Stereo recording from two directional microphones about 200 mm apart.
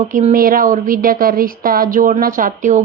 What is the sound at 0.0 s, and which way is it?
A woman's voice, 35° right (ahead or behind).